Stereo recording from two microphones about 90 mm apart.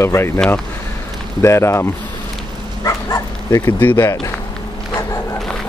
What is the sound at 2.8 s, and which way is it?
Bow-wow, 40° left (ahead or behind).